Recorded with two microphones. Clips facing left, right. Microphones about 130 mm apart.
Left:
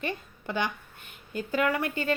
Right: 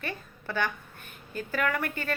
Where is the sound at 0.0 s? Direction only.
15° left (ahead or behind).